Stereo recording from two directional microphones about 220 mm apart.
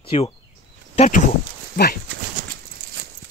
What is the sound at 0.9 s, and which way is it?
Speech, 35° left (ahead or behind).